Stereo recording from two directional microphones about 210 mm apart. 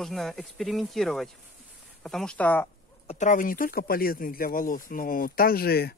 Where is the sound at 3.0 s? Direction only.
35° left (ahead or behind).